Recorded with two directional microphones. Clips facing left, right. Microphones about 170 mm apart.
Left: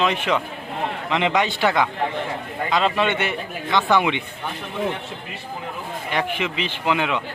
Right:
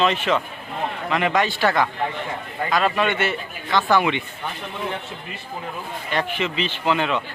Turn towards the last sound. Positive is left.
turn(degrees=10)  # may be behind; listen again after turning